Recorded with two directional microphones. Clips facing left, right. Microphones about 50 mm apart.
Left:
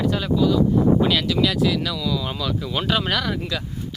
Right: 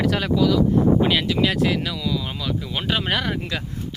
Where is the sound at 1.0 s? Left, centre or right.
Right.